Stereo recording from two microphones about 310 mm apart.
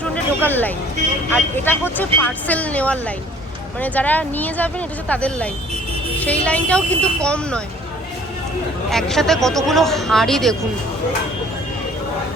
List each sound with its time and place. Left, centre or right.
0.0 s a sound: centre
1.3 s speech: centre
8.9 s speech: centre